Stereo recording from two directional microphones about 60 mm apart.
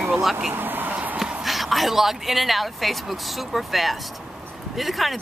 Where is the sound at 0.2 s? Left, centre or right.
Centre.